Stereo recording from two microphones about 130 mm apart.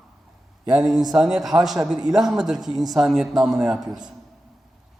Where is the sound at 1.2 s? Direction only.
5° right (ahead or behind).